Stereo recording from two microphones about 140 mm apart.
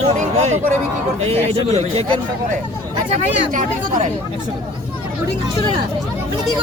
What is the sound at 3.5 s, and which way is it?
Speech, 65° right (ahead or behind).